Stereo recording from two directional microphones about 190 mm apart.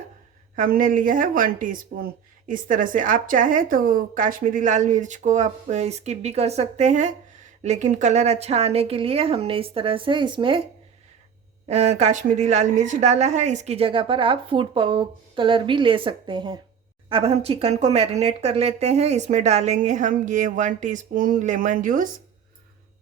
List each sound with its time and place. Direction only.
0.5 s speech: 45° right (ahead or behind); by 10.6 s 25° right (ahead or behind)
11.7 s a woman's voice: 35° right (ahead or behind)